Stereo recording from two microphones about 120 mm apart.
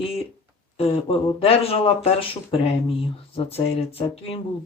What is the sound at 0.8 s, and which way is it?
Speech, 55° left (ahead or behind).